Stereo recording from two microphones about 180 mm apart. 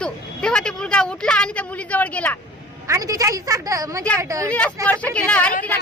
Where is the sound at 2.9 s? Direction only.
20° right (ahead or behind).